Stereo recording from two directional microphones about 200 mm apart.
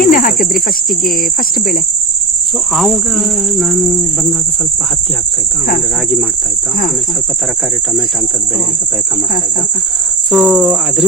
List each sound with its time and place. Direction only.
0.0 s speech: 45° left (ahead or behind)
2.7 s cricket: centre (ahead or behind)
10.3 s cricket: centre (ahead or behind)